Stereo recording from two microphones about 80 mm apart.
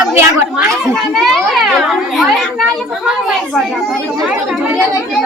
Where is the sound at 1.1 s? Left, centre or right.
Centre.